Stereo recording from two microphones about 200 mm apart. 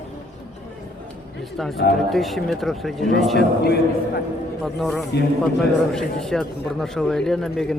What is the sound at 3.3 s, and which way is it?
Speech, 50° left (ahead or behind).